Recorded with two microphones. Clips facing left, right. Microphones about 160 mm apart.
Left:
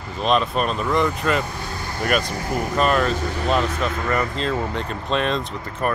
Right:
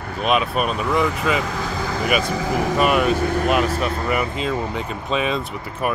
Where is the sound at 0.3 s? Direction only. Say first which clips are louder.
Even; 10° right (ahead or behind).